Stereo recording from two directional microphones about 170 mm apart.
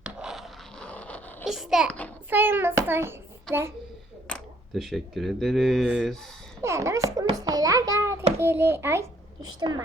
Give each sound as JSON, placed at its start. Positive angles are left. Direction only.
{"t": 0.0, "sound": "scratch", "side_deg": -5}
{"t": 1.5, "sound": "a child's voice", "side_deg": 0}
{"t": 2.3, "sound": "hands", "side_deg": -10}
{"t": 4.3, "sound": "speech", "side_deg": 0}
{"t": 6.6, "sound": "a child's voice", "side_deg": -15}
{"t": 8.4, "sound": "hands", "side_deg": -15}
{"t": 9.6, "sound": "a woman's voice", "side_deg": -25}